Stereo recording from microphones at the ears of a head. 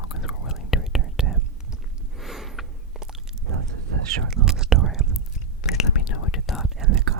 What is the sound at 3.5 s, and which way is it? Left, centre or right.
Whispering, right.